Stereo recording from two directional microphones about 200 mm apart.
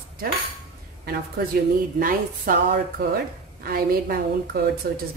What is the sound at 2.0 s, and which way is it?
Speech, 45° right (ahead or behind).